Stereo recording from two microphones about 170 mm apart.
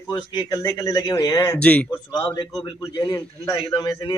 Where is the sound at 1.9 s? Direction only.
25° left (ahead or behind).